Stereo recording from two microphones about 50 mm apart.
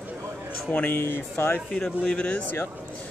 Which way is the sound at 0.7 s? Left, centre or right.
Left.